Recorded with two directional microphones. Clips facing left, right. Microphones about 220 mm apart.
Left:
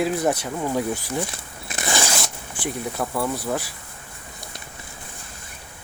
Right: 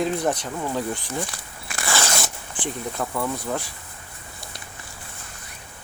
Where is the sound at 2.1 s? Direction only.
5° left (ahead or behind).